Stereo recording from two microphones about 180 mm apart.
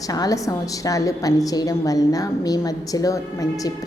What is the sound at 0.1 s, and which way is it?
A woman's voice, 20° left (ahead or behind).